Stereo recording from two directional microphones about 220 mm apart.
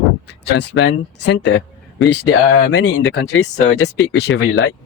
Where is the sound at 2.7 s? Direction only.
55° left (ahead or behind).